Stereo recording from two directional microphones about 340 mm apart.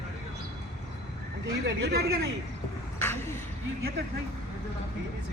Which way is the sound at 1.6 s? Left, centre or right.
Right.